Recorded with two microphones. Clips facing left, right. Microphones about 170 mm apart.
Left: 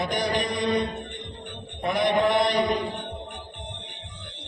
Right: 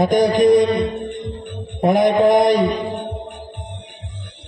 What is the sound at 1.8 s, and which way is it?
Mantra, 45° right (ahead or behind).